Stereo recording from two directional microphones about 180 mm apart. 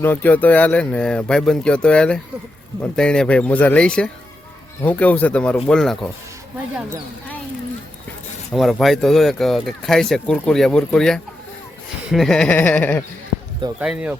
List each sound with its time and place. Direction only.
0.0 s speech: 10° left (ahead or behind)
8.5 s speech: centre (ahead or behind)
13.7 s speech: 5° right (ahead or behind)